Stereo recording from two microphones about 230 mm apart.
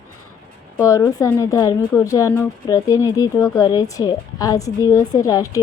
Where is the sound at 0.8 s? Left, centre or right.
Centre.